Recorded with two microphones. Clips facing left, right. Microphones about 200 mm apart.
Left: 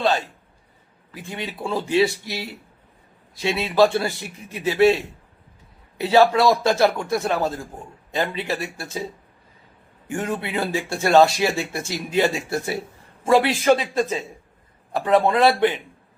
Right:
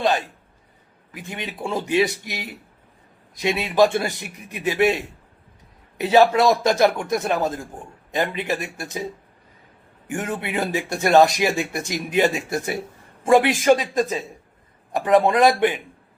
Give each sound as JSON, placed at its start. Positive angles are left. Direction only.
{"t": 1.1, "sound": "speech", "side_deg": -20}
{"t": 10.1, "sound": "speech", "side_deg": -15}